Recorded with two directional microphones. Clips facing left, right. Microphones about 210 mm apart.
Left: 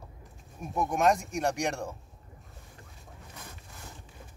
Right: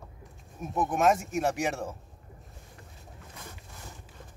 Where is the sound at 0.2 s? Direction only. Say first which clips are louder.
Right 3 dB; centre (ahead or behind).